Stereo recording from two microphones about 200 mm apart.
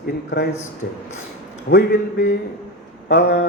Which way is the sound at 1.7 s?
55° left (ahead or behind).